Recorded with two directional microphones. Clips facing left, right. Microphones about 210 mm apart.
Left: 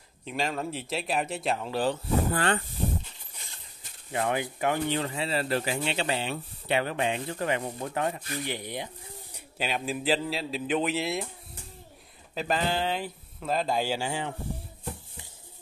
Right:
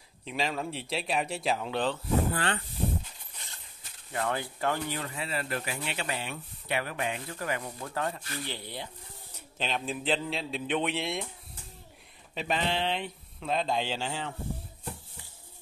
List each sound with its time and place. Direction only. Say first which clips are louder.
0.2 s speech: left 1 dB; centre (ahead or behind)
2.3 s speech: left 5 dB; 45° left (ahead or behind)
4.1 s speech: left 3 dB; 20° left (ahead or behind)
12.4 s speech: left 2 dB; centre (ahead or behind)